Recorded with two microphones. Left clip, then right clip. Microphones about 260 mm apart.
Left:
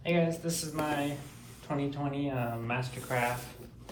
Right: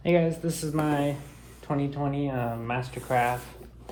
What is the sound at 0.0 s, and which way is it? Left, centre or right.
Speech, right.